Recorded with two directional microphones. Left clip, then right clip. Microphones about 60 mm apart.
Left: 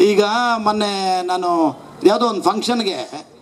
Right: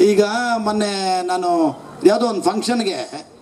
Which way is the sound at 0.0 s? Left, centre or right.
Centre.